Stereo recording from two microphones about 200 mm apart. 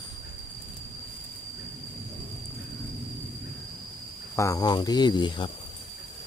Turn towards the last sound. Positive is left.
turn(degrees=25)  # may be behind; listen again after turning